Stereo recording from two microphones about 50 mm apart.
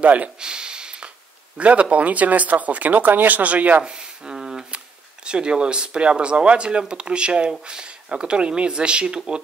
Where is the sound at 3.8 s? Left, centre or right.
Centre.